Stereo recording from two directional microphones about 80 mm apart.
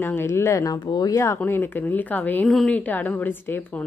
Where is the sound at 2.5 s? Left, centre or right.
Centre.